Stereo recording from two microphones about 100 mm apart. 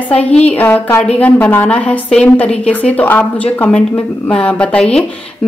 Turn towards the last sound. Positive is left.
turn(degrees=10)  # may be behind; listen again after turning